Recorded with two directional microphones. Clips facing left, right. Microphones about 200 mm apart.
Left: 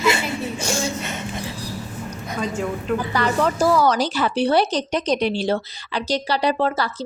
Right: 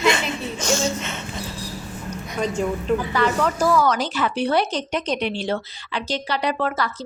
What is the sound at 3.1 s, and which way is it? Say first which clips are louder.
A woman's voice: even; 35° left (ahead or behind).